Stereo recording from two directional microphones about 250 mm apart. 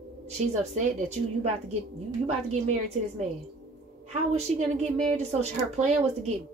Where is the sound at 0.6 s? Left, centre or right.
Right.